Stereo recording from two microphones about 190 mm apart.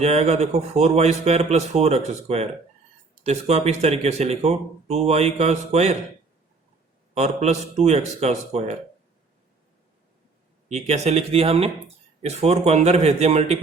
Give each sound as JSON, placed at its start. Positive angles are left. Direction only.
{"t": 0.0, "sound": "speech", "side_deg": -35}
{"t": 7.1, "sound": "speech", "side_deg": -35}
{"t": 10.7, "sound": "speech", "side_deg": -35}